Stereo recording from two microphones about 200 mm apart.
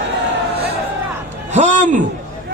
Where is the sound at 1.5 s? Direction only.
35° right (ahead or behind).